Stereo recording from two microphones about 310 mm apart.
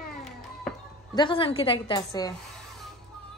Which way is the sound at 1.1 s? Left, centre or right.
Centre.